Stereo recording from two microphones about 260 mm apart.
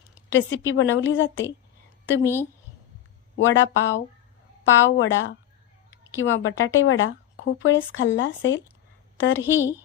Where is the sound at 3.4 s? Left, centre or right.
Left.